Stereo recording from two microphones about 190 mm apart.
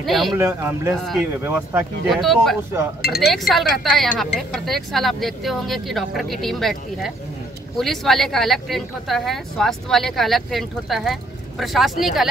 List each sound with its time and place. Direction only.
0.0 s speech: centre (ahead or behind)
0.3 s speech: 15° right (ahead or behind)
2.0 s speech: centre (ahead or behind)
3.0 s speech: 55° left (ahead or behind)
3.3 s speech: centre (ahead or behind)